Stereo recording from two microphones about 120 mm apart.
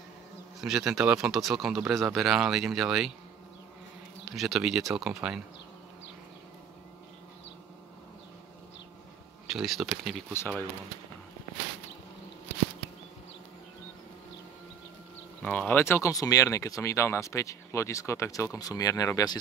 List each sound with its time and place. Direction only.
0.6 s speech: 5° right (ahead or behind)
4.4 s speech: centre (ahead or behind)
9.5 s speech: 5° right (ahead or behind)
10.3 s speech: 20° left (ahead or behind)
15.4 s speech: 10° left (ahead or behind); by 19.3 s 30° left (ahead or behind)